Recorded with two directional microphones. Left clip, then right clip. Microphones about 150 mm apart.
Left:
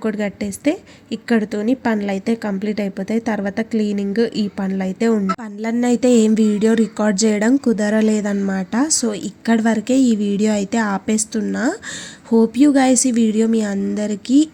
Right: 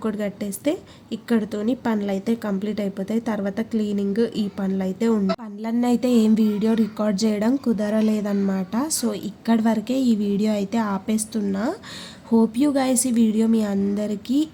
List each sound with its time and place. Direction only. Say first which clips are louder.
0.0 s speech: left 4 dB; 20° left (ahead or behind)